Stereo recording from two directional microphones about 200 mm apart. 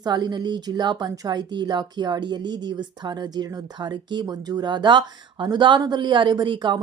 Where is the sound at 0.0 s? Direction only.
20° right (ahead or behind).